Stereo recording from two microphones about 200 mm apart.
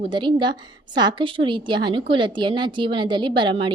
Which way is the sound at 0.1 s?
25° right (ahead or behind).